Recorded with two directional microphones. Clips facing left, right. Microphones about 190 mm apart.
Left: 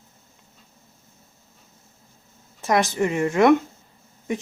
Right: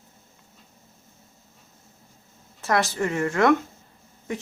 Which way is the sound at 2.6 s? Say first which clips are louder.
Left 3 dB; 15° left (ahead or behind).